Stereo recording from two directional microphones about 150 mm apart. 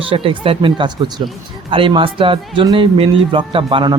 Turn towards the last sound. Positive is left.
turn(degrees=-35)  # may be behind; listen again after turning